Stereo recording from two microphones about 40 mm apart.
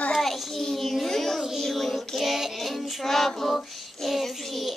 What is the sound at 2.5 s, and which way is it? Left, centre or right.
Child singing, centre.